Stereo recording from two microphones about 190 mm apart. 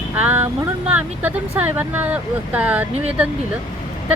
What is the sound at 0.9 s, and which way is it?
Speech, 10° right (ahead or behind).